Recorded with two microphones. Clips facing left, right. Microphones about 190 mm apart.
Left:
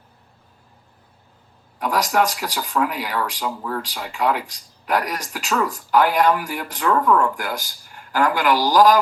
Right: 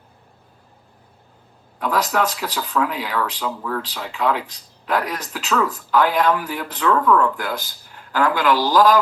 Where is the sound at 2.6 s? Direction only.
45° left (ahead or behind).